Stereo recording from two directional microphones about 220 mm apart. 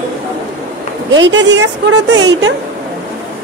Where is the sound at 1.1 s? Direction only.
55° right (ahead or behind).